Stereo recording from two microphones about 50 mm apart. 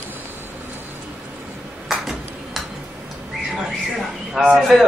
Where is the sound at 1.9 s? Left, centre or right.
Centre.